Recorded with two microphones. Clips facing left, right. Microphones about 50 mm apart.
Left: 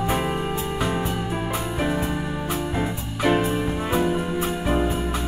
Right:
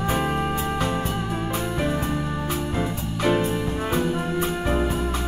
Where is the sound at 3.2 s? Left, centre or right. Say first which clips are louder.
Left 1 dB; centre.